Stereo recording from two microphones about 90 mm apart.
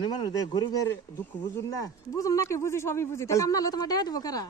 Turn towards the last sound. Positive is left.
turn(degrees=45)  # may be behind; listen again after turning